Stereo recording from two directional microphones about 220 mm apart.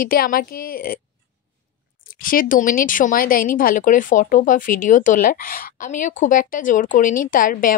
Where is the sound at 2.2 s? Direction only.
40° left (ahead or behind).